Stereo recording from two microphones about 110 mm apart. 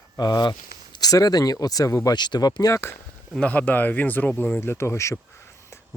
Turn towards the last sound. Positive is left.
turn(degrees=25)  # may be behind; listen again after turning